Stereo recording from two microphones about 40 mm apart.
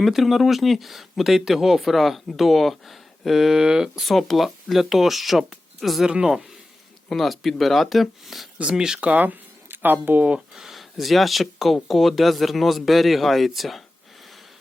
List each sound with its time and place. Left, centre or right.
0.0 s speech: centre
4.0 s speech: centre
6.1 s speech: centre
7.1 s speech: centre
8.7 s speech: centre
9.1 s speech: right
9.6 s speech: right
10.5 s speech: centre